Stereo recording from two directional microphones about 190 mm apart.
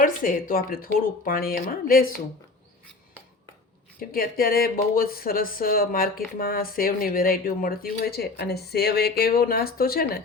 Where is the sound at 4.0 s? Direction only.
50° left (ahead or behind).